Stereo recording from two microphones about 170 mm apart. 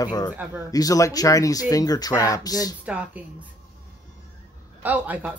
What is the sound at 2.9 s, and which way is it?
Speech, 5° right (ahead or behind).